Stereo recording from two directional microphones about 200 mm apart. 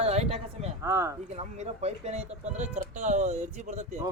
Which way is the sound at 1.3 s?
35° right (ahead or behind).